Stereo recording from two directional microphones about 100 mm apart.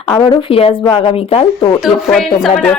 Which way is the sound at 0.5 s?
65° left (ahead or behind).